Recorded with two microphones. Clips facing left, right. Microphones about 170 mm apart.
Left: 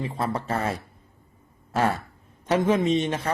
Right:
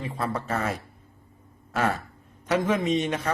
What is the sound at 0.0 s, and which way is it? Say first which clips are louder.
A man's voice: left 2 dB; 30° left (ahead or behind).